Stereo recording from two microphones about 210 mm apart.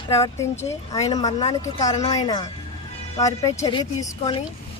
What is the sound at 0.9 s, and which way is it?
A woman's voice, 15° left (ahead or behind).